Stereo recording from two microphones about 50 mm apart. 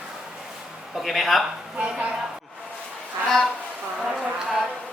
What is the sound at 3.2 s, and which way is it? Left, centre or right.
Speech, centre.